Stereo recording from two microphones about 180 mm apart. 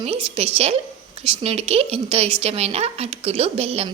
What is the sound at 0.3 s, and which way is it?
A woman's voice, 35° right (ahead or behind).